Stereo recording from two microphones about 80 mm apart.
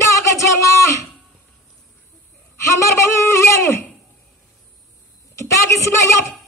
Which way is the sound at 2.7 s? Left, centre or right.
Left.